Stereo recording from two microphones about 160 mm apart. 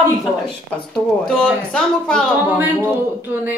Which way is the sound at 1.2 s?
5° left (ahead or behind).